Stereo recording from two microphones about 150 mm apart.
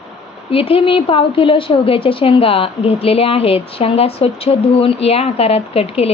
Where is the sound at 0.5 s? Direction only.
40° left (ahead or behind).